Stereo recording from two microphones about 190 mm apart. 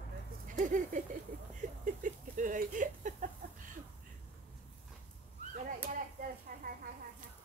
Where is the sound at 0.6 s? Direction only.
40° right (ahead or behind).